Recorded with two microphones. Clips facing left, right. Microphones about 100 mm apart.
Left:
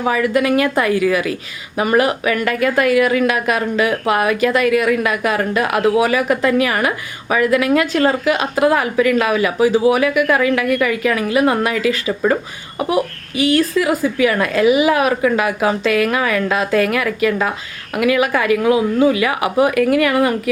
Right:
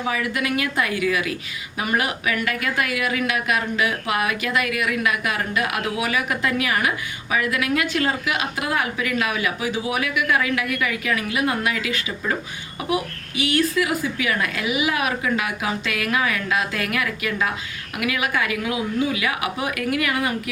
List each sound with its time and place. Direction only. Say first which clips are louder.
0.0 s a woman's voice: left 8 dB; 45° left (ahead or behind)